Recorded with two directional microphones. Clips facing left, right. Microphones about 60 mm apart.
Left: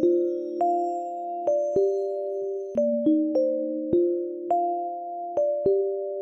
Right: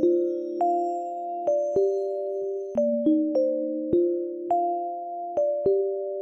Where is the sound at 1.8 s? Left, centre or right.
Centre.